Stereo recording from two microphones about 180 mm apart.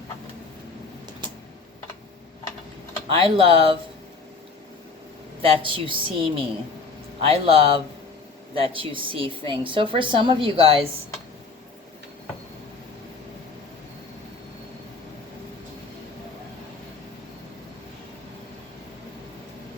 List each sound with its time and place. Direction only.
3.1 s a woman's voice: 30° right (ahead or behind)
5.4 s a woman's voice: 30° right (ahead or behind)